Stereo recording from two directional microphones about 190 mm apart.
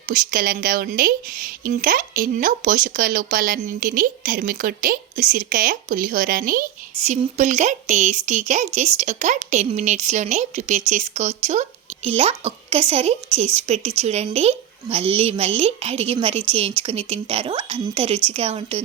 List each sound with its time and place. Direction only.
0.1 s speech: 50° right (ahead or behind)
7.1 s a woman's voice: 40° right (ahead or behind)